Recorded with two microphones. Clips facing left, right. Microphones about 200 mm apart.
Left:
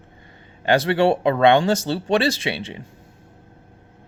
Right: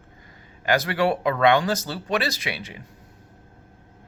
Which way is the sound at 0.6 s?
30° left (ahead or behind).